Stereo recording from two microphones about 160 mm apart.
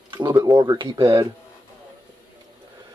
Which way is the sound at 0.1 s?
25° right (ahead or behind).